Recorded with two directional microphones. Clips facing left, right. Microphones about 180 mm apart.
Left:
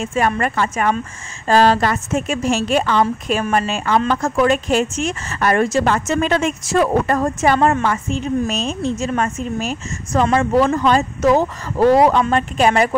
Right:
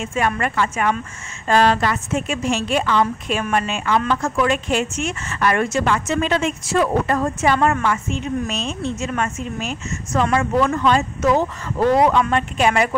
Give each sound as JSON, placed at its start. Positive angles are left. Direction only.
{"t": 0.0, "sound": "a woman's voice", "side_deg": 35}